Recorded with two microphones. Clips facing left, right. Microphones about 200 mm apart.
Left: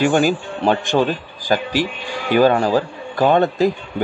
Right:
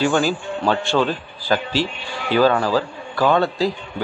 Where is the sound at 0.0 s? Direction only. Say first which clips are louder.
Left 3 dB; 15° left (ahead or behind).